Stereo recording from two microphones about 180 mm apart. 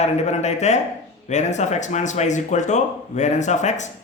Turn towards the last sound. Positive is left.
turn(degrees=40)  # may be behind; listen again after turning